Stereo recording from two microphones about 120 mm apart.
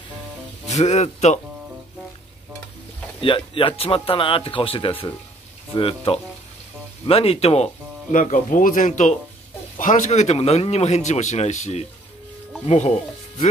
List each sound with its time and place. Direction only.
0.7 s a man's voice: 70° left (ahead or behind)
3.2 s a man's voice: 45° left (ahead or behind); by 13.5 s 70° left (ahead or behind)